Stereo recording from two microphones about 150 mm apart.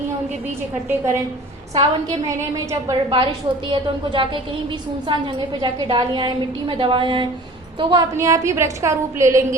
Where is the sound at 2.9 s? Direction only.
30° right (ahead or behind).